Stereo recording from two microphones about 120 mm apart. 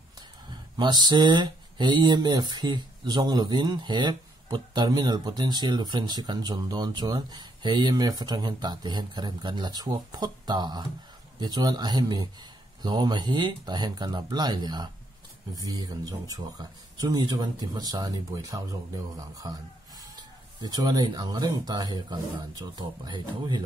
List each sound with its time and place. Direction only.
0.5 s speech: 40° right (ahead or behind)